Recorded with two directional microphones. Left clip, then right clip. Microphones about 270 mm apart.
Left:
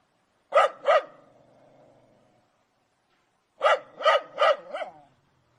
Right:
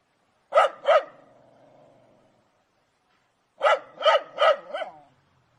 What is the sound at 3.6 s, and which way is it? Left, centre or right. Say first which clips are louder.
Dog: right 1 dB; centre.